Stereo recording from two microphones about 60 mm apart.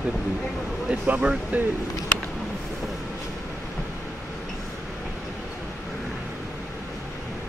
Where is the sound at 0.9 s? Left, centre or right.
Centre.